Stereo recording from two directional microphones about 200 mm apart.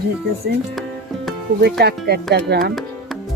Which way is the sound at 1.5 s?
55° right (ahead or behind).